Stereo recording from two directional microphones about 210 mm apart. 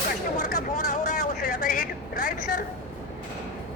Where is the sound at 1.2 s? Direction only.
40° left (ahead or behind).